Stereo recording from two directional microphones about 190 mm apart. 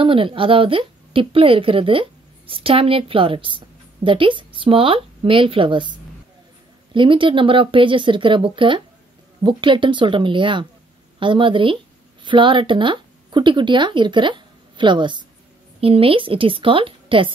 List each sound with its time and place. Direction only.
0.0 s a woman's voice: 30° right (ahead or behind)